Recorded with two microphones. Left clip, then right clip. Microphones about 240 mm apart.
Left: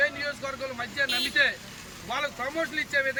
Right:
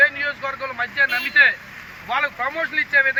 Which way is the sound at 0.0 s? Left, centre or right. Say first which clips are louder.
Right 9 dB; centre.